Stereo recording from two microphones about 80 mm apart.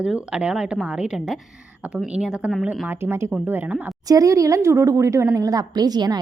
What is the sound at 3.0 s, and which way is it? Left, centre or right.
Speech, right.